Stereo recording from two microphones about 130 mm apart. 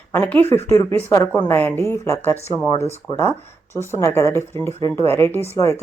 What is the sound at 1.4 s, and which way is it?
Speech, 15° left (ahead or behind).